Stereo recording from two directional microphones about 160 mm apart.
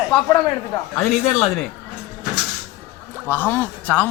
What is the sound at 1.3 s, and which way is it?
Speech, 40° left (ahead or behind).